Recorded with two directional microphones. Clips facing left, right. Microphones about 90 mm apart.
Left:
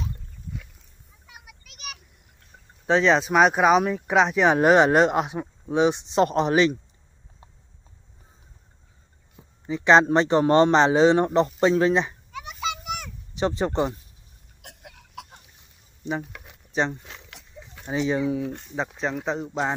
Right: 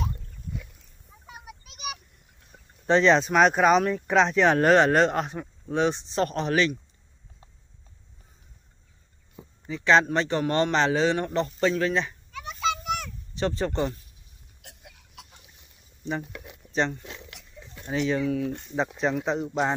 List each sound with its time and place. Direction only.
1.2 s a sound: 35° right (ahead or behind)
2.9 s speech: 5° left (ahead or behind); by 6.8 s 20° left (ahead or behind)
9.7 s a man's voice: 20° left (ahead or behind)
11.6 s a sound: 25° left (ahead or behind)
14.6 s chicken: 60° left (ahead or behind)
16.7 s a man's voice: 10° left (ahead or behind)
18.5 s speech: centre (ahead or behind)